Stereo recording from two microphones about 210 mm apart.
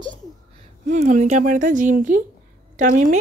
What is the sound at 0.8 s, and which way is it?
Speech, 35° right (ahead or behind).